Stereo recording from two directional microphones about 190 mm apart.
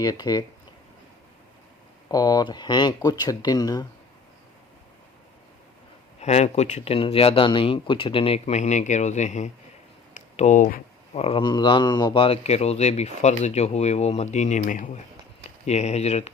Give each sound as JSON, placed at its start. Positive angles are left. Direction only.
{"t": 0.0, "sound": "speech", "side_deg": 20}
{"t": 2.0, "sound": "speech", "side_deg": 20}
{"t": 6.1, "sound": "speech", "side_deg": 35}